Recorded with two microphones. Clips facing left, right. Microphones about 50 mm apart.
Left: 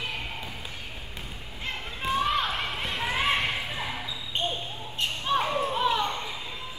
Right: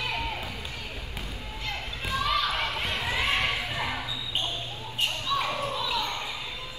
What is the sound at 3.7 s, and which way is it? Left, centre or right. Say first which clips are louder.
Basketball bounce: right 2 dB; right.